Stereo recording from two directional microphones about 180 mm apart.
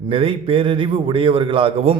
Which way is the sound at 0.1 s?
30° right (ahead or behind).